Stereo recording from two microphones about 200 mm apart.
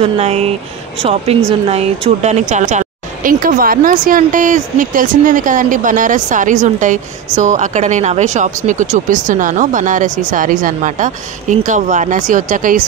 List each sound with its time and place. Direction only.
0.0 s a woman's voice: 30° right (ahead or behind)